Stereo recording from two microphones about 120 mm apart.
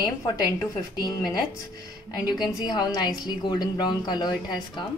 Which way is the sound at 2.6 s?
35° left (ahead or behind).